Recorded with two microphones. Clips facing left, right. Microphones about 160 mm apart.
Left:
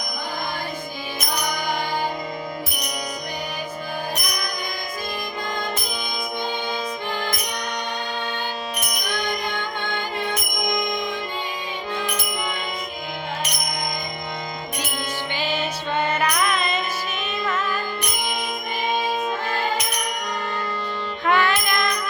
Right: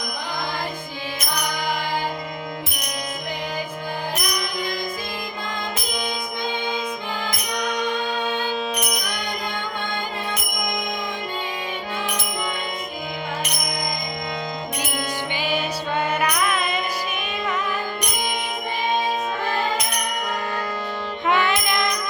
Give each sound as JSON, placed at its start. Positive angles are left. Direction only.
{"t": 15.4, "sound": "music", "side_deg": -10}
{"t": 21.2, "sound": "music", "side_deg": -20}